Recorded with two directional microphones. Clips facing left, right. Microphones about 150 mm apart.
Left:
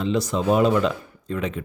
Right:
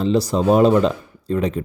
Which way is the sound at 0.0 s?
35° right (ahead or behind).